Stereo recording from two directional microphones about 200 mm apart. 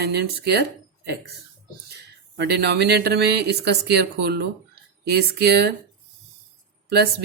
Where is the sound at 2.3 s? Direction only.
55° right (ahead or behind).